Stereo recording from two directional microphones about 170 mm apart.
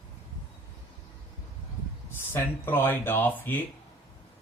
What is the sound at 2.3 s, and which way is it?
Speech, 10° left (ahead or behind).